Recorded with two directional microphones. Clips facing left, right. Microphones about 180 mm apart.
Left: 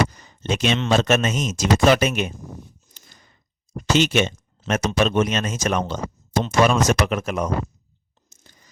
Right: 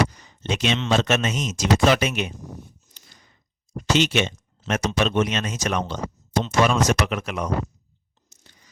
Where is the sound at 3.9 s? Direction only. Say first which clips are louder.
Left 2 dB; 45° left (ahead or behind).